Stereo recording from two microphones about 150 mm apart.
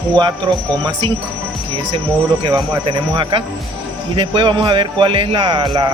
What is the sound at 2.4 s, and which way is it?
Speech, 35° right (ahead or behind).